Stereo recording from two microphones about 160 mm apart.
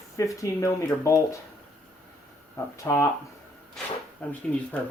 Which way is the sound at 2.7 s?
20° left (ahead or behind).